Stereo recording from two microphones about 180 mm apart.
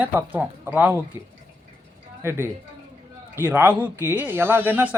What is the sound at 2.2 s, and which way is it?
A woman's voice, 15° right (ahead or behind).